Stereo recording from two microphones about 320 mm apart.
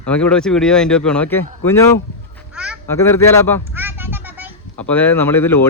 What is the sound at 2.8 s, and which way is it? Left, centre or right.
Speech, centre.